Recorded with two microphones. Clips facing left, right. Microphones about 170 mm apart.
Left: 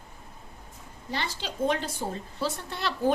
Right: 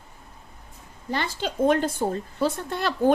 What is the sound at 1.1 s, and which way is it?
Speech, 50° right (ahead or behind).